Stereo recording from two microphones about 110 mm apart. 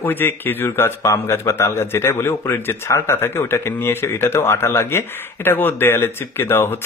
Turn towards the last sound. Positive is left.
turn(degrees=20)  # may be behind; listen again after turning